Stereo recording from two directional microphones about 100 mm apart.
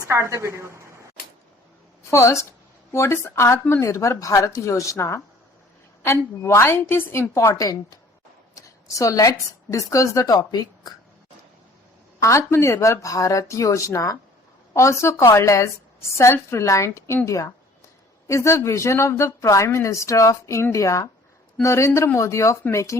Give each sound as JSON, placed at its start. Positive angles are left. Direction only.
{"t": 0.0, "sound": "a woman's voice", "side_deg": -25}
{"t": 2.0, "sound": "speech", "side_deg": 30}
{"t": 8.5, "sound": "a sound", "side_deg": 35}
{"t": 9.7, "sound": "speech", "side_deg": 30}
{"t": 12.2, "sound": "speech", "side_deg": 30}